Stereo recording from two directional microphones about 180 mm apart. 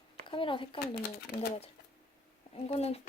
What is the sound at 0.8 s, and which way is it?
Speech, 60° left (ahead or behind).